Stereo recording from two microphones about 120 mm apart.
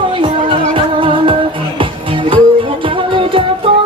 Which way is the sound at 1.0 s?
45° right (ahead or behind).